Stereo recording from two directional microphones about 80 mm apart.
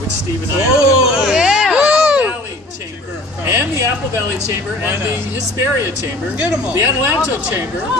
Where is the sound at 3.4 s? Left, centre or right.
Right.